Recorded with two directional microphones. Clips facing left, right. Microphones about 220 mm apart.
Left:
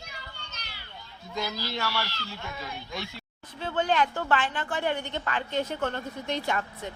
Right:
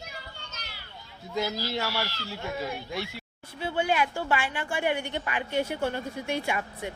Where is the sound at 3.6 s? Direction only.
10° right (ahead or behind).